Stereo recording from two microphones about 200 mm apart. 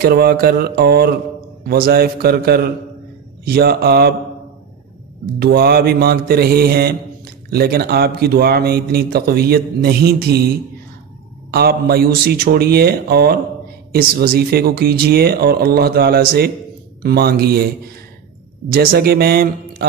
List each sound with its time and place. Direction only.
0.0 s a man's voice: 50° right (ahead or behind)
5.4 s a man's voice: 50° right (ahead or behind)
11.5 s a man's voice: 50° right (ahead or behind)
18.7 s a man's voice: 50° right (ahead or behind)